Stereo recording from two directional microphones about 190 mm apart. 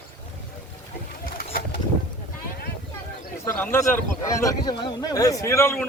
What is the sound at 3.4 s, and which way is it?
A man's voice, 10° left (ahead or behind).